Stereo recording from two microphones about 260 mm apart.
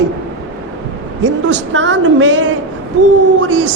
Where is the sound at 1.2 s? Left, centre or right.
Right.